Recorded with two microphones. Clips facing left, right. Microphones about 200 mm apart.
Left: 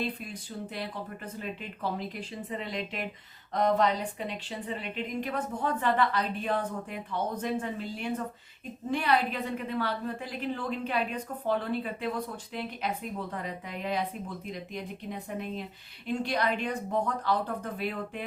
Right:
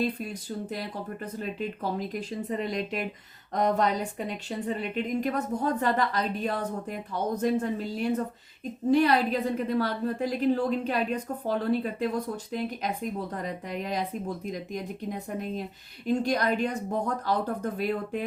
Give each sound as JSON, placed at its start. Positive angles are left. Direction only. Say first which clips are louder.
{"t": 0.0, "sound": "a woman's voice", "louder": "right 5 dB", "side_deg": -40}